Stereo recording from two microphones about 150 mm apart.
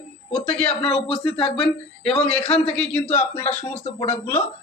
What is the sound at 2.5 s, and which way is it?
Speech, 5° left (ahead or behind).